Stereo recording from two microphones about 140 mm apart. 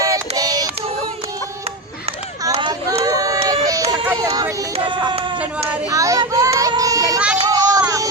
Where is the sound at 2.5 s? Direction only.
30° right (ahead or behind).